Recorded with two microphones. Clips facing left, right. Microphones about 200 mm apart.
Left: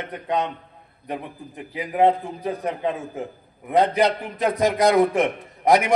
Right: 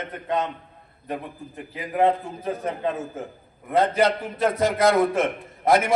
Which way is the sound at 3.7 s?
15° left (ahead or behind).